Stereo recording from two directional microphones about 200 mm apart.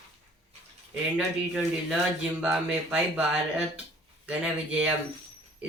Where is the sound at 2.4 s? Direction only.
5° right (ahead or behind).